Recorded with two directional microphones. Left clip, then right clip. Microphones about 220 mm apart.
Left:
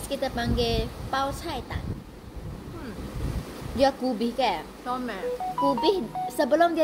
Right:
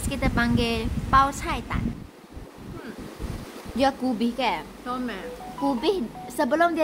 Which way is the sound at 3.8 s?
25° right (ahead or behind).